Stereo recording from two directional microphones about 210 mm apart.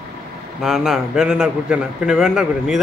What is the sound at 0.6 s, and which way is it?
A man's voice, centre (ahead or behind).